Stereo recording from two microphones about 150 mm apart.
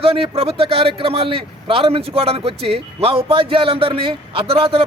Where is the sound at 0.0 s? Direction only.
40° right (ahead or behind).